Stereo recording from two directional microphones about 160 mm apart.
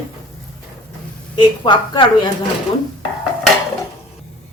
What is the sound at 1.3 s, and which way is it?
Speech, 30° left (ahead or behind).